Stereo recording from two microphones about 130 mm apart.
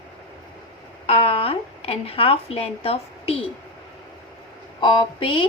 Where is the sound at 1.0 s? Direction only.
50° left (ahead or behind).